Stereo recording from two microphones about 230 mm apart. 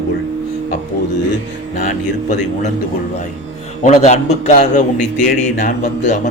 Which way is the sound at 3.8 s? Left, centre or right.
Left.